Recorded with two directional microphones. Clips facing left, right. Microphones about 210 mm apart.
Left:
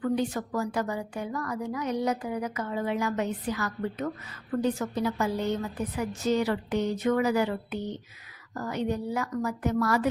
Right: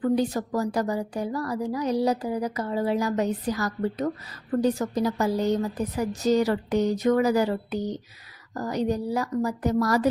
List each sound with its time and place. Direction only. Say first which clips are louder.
0.0 s a woman's voice: right 4 dB; 35° right (ahead or behind)